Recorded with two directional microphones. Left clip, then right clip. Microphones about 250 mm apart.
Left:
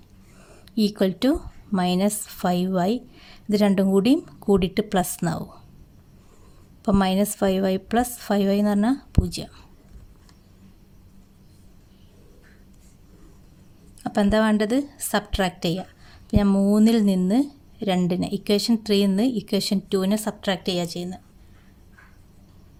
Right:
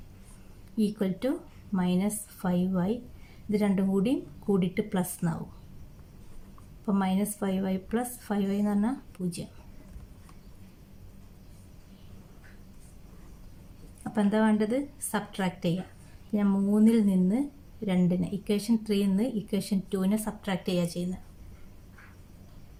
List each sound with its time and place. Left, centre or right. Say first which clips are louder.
0.8 s a woman's voice: left 8 dB; left
6.8 s a woman's voice: left 8 dB; left
14.0 s a woman's voice: left 7 dB; left